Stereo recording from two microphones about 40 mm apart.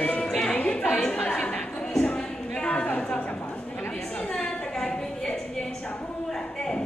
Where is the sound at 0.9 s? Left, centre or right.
Centre.